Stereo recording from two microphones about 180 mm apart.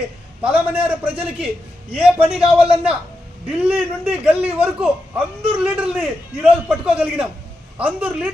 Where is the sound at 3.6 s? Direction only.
10° right (ahead or behind).